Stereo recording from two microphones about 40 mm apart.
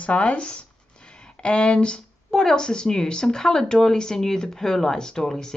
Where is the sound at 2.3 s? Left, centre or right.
Centre.